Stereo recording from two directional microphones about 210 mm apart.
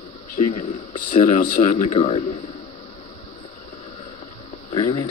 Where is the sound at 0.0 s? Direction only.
30° left (ahead or behind).